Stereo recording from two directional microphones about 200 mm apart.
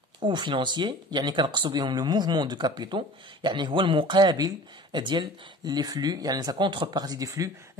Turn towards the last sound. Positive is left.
turn(degrees=-15)  # may be behind; listen again after turning